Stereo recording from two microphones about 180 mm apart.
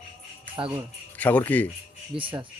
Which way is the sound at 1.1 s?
10° left (ahead or behind).